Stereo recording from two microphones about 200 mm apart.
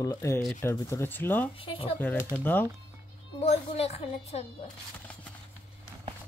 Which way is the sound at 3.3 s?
30° left (ahead or behind).